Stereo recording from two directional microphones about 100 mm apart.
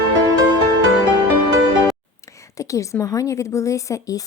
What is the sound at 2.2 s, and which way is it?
A woman's voice, 30° left (ahead or behind).